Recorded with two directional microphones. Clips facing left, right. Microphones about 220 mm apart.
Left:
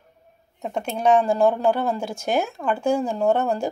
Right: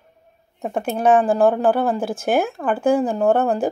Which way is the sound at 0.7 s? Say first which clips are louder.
Right 3 dB; 50° right (ahead or behind).